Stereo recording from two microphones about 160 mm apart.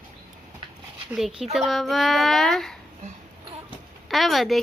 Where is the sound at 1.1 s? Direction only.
Centre (ahead or behind).